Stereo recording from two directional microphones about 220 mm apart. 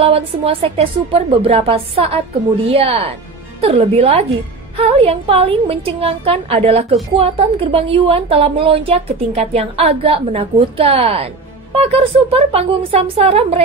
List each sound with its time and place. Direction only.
0.0 s a woman's voice: 25° right (ahead or behind)